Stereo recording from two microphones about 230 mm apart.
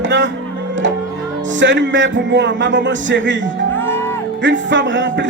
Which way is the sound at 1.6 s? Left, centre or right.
Right.